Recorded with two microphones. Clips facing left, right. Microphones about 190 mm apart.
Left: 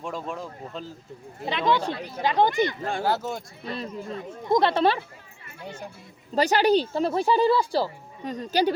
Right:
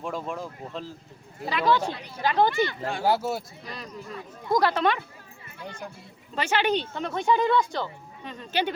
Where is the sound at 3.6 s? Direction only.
30° left (ahead or behind).